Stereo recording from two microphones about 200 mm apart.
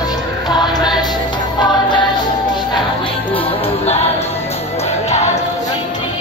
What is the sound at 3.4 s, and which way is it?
Music, 30° left (ahead or behind).